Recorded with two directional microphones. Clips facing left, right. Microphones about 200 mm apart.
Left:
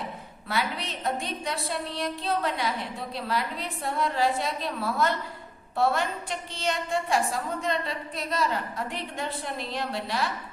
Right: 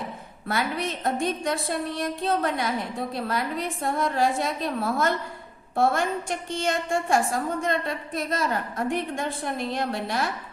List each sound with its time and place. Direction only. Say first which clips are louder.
0.4 s a woman's voice: right 3 dB; 50° right (ahead or behind)